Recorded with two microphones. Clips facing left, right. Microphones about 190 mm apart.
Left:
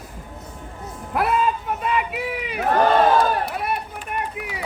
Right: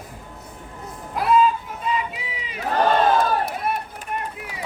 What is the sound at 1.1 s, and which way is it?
Run, 65° left (ahead or behind).